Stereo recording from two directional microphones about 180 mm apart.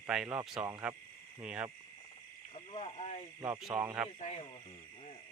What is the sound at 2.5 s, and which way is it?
Speech, 35° left (ahead or behind).